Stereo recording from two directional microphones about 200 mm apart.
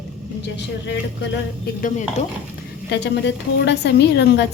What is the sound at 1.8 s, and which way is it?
Speech, 35° left (ahead or behind).